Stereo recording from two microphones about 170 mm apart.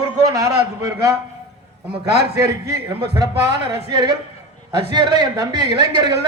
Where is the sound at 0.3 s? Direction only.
20° right (ahead or behind).